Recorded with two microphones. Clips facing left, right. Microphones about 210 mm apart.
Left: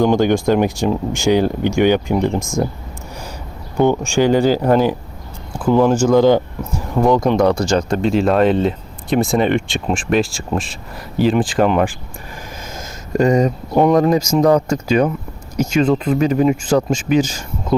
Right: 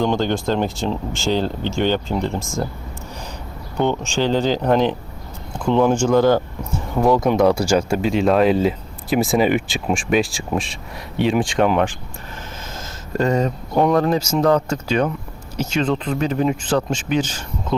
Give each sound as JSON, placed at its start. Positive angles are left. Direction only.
{"t": 0.0, "sound": "speech", "side_deg": 10}
{"t": 3.8, "sound": "speech", "side_deg": 10}
{"t": 6.1, "sound": "speech", "side_deg": 15}
{"t": 6.9, "sound": "speech", "side_deg": 0}
{"t": 13.1, "sound": "speech", "side_deg": 15}